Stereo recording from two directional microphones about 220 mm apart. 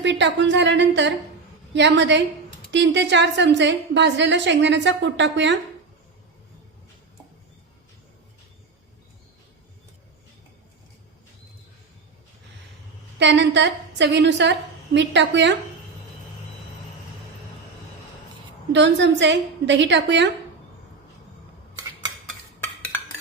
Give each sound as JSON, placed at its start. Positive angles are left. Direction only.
{"t": 0.0, "sound": "a woman's voice", "side_deg": -55}
{"t": 13.1, "sound": "a woman's voice", "side_deg": -55}
{"t": 18.7, "sound": "a woman's voice", "side_deg": -55}